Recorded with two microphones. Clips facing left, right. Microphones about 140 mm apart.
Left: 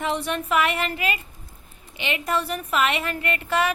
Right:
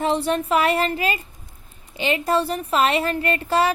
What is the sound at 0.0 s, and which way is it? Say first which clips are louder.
A woman's voice: right 5 dB; 35° right (ahead or behind).